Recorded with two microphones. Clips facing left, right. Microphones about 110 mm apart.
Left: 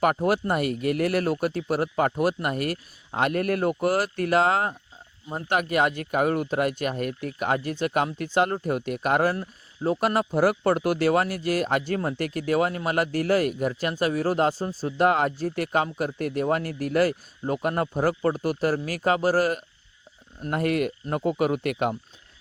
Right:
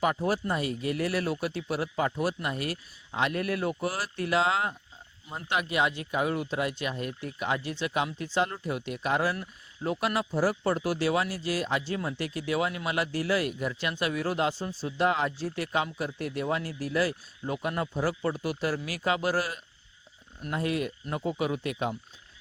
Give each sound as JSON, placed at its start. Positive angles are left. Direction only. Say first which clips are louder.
{"t": 0.0, "sound": "speech", "louder": "left 5 dB", "side_deg": 60}
{"t": 9.3, "sound": "speech", "louder": "left 5 dB", "side_deg": 35}
{"t": 10.0, "sound": "speech", "louder": "left 5 dB", "side_deg": 45}
{"t": 10.3, "sound": "speech", "louder": "left 5 dB", "side_deg": 65}